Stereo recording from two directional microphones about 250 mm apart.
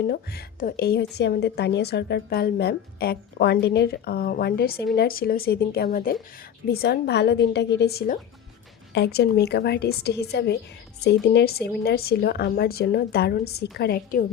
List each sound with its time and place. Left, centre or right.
0.1 s a woman's voice: left